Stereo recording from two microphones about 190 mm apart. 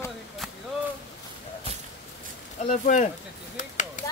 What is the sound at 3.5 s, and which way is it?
Chop, 40° left (ahead or behind).